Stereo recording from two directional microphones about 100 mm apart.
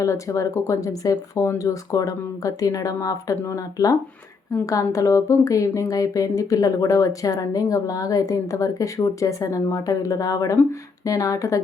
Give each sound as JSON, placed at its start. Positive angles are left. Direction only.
{"t": 0.0, "sound": "speech", "side_deg": 30}